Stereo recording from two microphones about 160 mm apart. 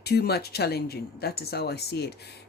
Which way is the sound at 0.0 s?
85° left.